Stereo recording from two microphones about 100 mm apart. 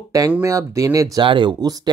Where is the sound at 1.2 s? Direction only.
55° right (ahead or behind).